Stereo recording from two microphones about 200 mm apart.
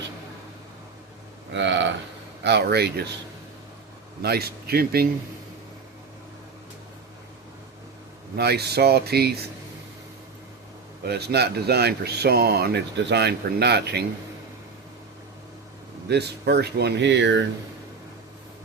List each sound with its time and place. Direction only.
1.5 s speech: 65° right (ahead or behind)
4.2 s speech: 55° right (ahead or behind)
8.4 s speech: 55° right (ahead or behind)
11.0 s speech: 55° right (ahead or behind)
16.0 s speech: 55° right (ahead or behind)